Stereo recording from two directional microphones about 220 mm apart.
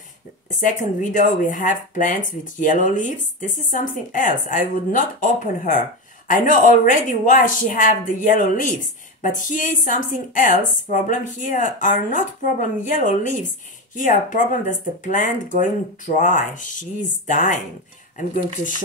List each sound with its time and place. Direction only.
0.6 s speech: 35° left (ahead or behind)